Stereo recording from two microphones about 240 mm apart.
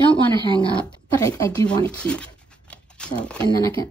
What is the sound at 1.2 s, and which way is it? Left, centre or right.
Speech, centre.